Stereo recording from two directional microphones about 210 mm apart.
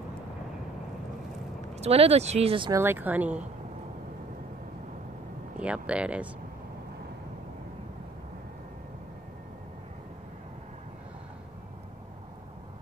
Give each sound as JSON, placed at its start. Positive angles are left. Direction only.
{"t": 1.8, "sound": "speech", "side_deg": -30}
{"t": 2.8, "sound": "speech", "side_deg": -10}
{"t": 5.6, "sound": "speech", "side_deg": -5}